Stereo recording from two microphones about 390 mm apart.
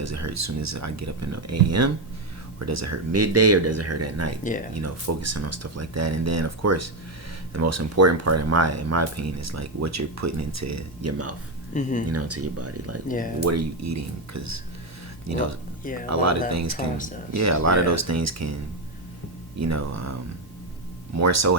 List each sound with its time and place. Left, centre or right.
0.0 s speech: right
11.7 s speech: centre
12.1 s speech: right
13.1 s speech: centre
13.4 s speech: right
16.7 s speech: centre
17.3 s speech: right
19.5 s speech: right
21.2 s speech: right